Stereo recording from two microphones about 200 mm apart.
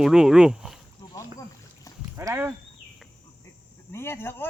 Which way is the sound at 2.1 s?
10° right (ahead or behind).